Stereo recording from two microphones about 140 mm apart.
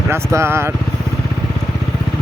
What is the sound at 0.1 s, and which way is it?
Speech, 20° right (ahead or behind).